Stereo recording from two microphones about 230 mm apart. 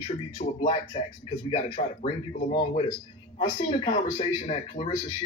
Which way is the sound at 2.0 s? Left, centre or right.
Left.